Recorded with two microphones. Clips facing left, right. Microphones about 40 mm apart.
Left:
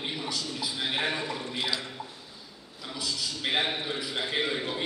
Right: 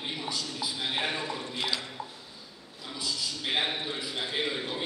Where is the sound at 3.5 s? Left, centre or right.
Centre.